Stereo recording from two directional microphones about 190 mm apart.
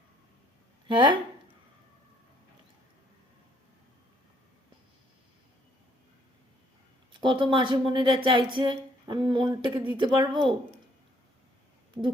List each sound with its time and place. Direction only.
0.9 s speech: 25° right (ahead or behind)
7.2 s speech: 25° right (ahead or behind)